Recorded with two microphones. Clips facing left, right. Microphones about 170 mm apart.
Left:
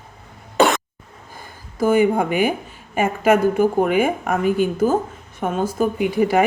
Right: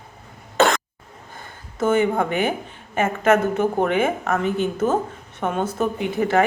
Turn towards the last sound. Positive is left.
turn(degrees=10)  # may be behind; listen again after turning